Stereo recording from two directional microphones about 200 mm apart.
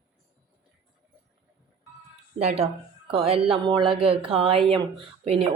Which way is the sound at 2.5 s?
30° right (ahead or behind).